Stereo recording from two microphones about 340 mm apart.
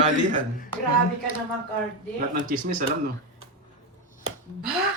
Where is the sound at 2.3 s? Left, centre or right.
Right.